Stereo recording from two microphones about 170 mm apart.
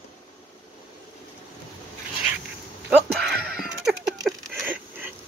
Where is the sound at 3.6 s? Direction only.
Centre (ahead or behind).